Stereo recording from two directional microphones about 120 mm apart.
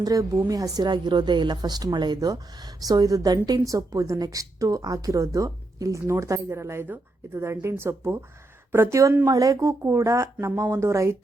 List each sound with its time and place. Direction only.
0.0 s a woman's voice: 30° right (ahead or behind)